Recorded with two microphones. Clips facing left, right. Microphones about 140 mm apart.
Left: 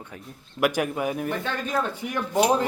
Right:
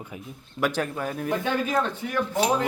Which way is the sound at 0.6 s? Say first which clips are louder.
Left 3 dB; 10° left (ahead or behind).